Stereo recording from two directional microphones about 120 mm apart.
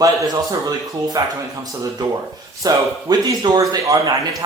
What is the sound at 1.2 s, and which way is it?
Speech, 35° right (ahead or behind).